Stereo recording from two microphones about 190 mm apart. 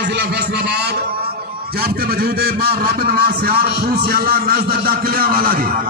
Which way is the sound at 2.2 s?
55° right (ahead or behind).